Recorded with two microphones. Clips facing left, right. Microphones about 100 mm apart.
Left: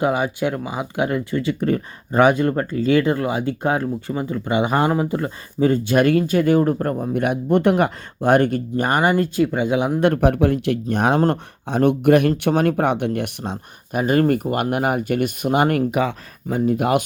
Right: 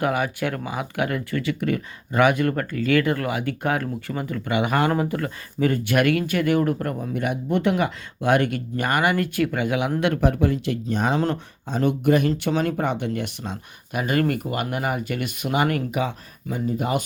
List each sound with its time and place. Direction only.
0.0 s speech: 25° left (ahead or behind)
7.1 s speech: 50° left (ahead or behind); by 9.9 s 30° left (ahead or behind)
10.2 s speech: 60° left (ahead or behind)
15.9 s speech: 70° left (ahead or behind)